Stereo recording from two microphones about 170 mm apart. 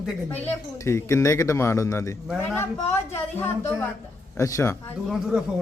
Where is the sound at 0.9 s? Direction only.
15° left (ahead or behind).